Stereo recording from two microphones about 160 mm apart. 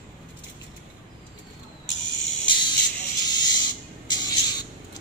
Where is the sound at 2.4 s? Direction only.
30° left (ahead or behind).